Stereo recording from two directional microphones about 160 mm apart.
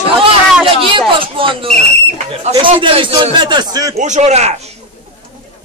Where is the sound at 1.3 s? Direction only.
35° right (ahead or behind).